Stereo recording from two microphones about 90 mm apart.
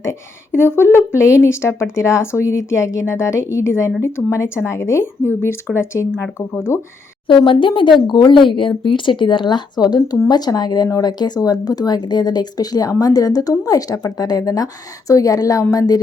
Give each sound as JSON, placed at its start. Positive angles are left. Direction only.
{"t": 0.0, "sound": "speech", "side_deg": 25}
{"t": 6.7, "sound": "music", "side_deg": 35}
{"t": 7.3, "sound": "speech", "side_deg": 70}
{"t": 15.7, "sound": "music", "side_deg": 40}